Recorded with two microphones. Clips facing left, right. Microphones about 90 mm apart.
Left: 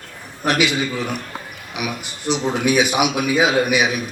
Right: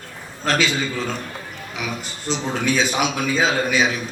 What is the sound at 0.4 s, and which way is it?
Speech, 15° left (ahead or behind).